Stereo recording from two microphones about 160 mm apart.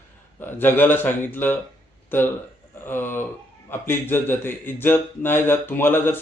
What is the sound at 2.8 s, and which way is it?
Speech, 15° left (ahead or behind).